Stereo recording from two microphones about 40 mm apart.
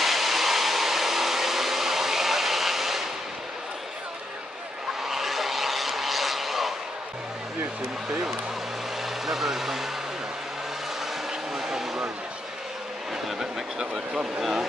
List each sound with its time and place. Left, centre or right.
0.0 s a sound: centre
5.0 s vehicle: centre
7.8 s speech: centre
11.5 s vehicle: centre
13.4 s speech: centre